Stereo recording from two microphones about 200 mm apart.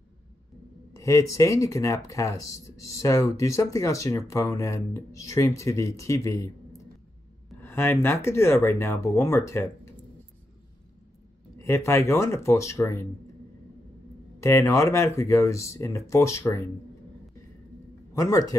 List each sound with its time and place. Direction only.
0.9 s a sound: 15° left (ahead or behind)
1.3 s speech: 15° left (ahead or behind)
11.6 s speech: 15° left (ahead or behind)
14.4 s speech: 15° left (ahead or behind)
18.1 s speech: 15° left (ahead or behind)